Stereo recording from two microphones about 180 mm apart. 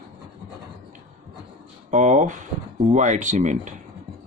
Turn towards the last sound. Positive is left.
turn(degrees=-40)  # may be behind; listen again after turning